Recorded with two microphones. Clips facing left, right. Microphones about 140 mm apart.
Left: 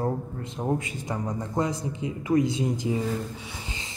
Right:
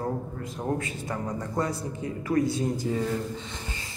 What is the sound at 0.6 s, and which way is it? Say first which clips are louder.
A man's voice: left 2 dB; 20° left (ahead or behind).